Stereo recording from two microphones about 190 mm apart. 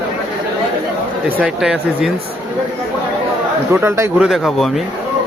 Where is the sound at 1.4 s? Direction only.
5° right (ahead or behind).